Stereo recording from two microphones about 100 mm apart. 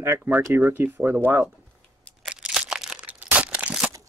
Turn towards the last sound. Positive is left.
turn(degrees=-10)  # may be behind; listen again after turning